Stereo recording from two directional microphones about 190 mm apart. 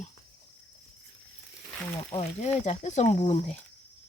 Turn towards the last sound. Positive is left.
turn(degrees=35)  # may be behind; listen again after turning